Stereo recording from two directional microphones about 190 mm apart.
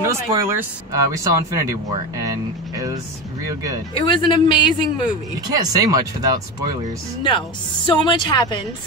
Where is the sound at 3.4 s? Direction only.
20° right (ahead or behind).